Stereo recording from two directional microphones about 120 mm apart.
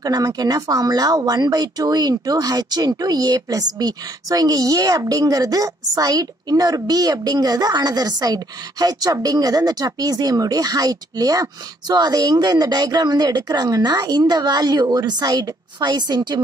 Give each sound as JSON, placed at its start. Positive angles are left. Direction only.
{"t": 0.0, "sound": "speech", "side_deg": -30}